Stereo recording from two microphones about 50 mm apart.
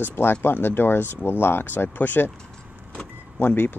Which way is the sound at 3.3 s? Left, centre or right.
Left.